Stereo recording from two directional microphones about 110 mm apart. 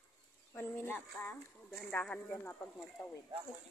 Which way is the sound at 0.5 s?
15° left (ahead or behind).